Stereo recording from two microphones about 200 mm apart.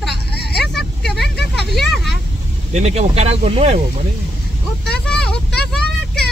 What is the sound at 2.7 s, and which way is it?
Speech, 35° right (ahead or behind).